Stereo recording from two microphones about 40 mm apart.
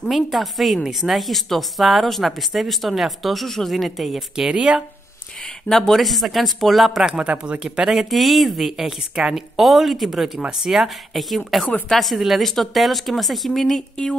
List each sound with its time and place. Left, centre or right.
0.1 s speech: centre
4.4 s speech: right
5.4 s speech: centre
7.2 s speech: right
7.6 s speech: centre
8.1 s speech: centre
11.1 s speech: centre